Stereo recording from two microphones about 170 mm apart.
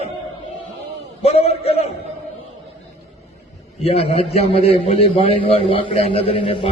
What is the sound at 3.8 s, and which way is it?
A man's voice, 35° left (ahead or behind).